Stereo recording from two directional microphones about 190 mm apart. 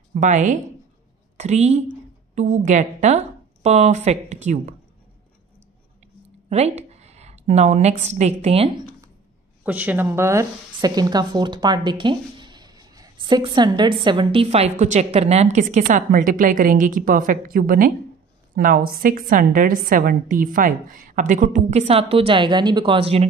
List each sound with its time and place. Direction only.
0.1 s a woman's voice: 40° right (ahead or behind)
6.5 s a sound: 35° right (ahead or behind)
8.1 s a woman's voice: 35° right (ahead or behind)
9.6 s a woman's voice: 10° right (ahead or behind); by 23.2 s 30° right (ahead or behind)